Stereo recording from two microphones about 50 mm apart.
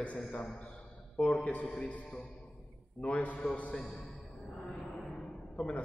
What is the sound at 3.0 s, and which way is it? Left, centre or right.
Speech, left.